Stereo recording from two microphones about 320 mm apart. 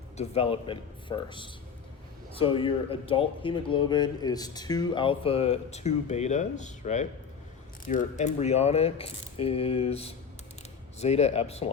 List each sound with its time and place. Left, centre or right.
0.2 s speech: centre